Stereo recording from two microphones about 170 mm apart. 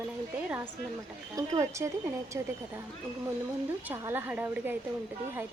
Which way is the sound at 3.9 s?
10° right (ahead or behind).